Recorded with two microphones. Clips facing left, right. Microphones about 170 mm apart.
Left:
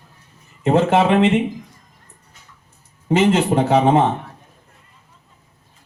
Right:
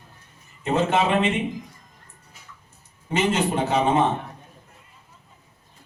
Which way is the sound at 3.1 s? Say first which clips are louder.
Left 7 dB; 70° left (ahead or behind).